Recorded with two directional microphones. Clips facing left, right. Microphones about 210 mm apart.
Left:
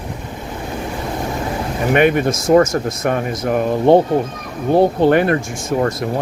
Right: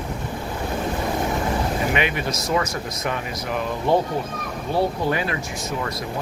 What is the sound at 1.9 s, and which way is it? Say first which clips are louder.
Speech: left 10 dB; 50° left (ahead or behind).